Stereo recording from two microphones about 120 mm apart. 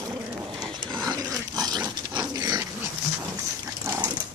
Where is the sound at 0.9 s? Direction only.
35° right (ahead or behind).